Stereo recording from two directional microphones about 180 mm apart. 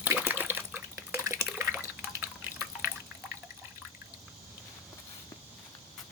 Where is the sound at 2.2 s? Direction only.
15° right (ahead or behind).